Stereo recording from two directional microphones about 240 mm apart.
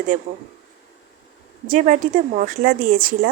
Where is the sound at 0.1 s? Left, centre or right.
Right.